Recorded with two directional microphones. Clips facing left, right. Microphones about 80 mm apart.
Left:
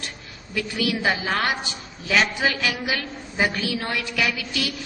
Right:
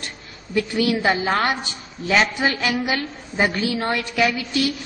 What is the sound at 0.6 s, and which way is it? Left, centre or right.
A woman's voice, right.